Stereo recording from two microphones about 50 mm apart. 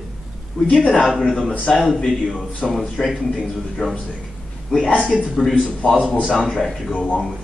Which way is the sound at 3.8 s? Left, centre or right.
Centre.